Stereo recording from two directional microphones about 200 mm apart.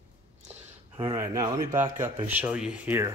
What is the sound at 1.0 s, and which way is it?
Speech, 15° right (ahead or behind).